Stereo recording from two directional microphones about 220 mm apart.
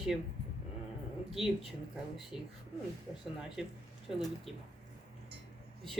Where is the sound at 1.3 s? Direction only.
Centre (ahead or behind).